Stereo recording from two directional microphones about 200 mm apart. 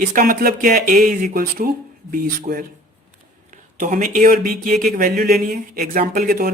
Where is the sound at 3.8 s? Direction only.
40° right (ahead or behind).